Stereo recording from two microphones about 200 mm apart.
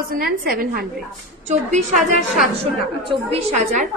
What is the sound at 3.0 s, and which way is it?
Speech, 35° right (ahead or behind).